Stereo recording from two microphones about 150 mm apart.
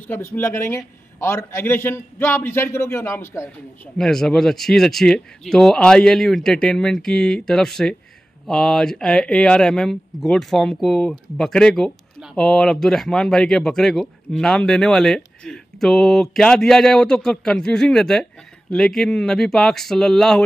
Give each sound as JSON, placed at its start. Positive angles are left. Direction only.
{"t": 0.0, "sound": "a man's voice", "side_deg": 15}
{"t": 4.0, "sound": "speech", "side_deg": 5}